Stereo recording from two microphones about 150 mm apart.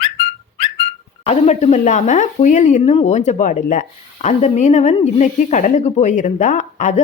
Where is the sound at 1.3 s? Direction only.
45° left (ahead or behind).